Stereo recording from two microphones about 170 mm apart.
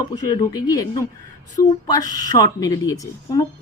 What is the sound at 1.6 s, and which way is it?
Speech, 55° left (ahead or behind).